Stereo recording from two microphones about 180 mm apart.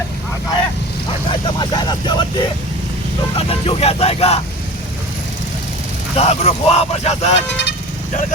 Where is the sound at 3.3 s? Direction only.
35° left (ahead or behind).